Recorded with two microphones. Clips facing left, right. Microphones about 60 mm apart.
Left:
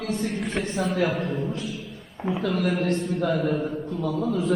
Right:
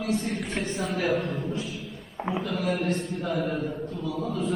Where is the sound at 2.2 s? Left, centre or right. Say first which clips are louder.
Left 4 dB; centre.